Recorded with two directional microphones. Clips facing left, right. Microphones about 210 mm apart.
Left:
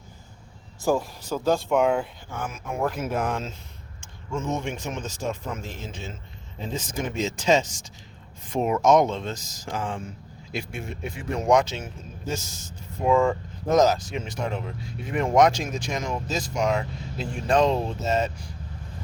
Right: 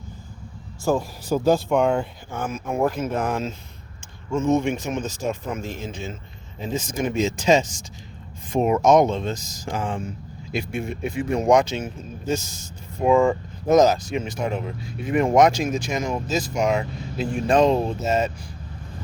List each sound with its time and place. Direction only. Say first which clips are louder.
0.8 s speech: right 1 dB; 15° left (ahead or behind)
1.3 s speech: right 5 dB; 10° right (ahead or behind)
1.7 s speech: right 2 dB; 5° left (ahead or behind)
2.4 s speech: right 6 dB; 30° right (ahead or behind)
2.9 s speech: right 2 dB; 5° left (ahead or behind)
3.2 s speech: right 4 dB; 10° right (ahead or behind)
13.1 s speech: right 3 dB; 10° right (ahead or behind)